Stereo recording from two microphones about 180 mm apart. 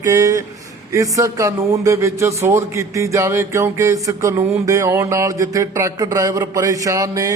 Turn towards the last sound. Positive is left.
turn(degrees=-20)  # may be behind; listen again after turning